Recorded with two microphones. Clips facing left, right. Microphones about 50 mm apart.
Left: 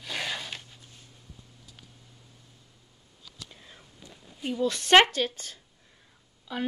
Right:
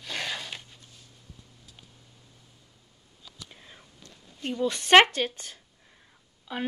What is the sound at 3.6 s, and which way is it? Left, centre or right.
Whispering, centre.